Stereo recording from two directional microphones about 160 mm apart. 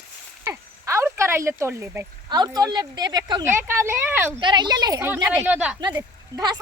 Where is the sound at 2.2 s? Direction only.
25° right (ahead or behind).